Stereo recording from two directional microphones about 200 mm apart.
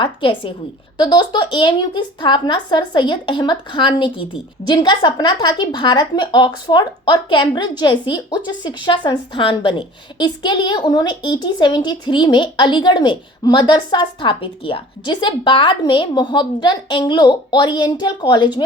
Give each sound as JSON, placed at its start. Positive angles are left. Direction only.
{"t": 0.0, "sound": "a woman's voice", "side_deg": 25}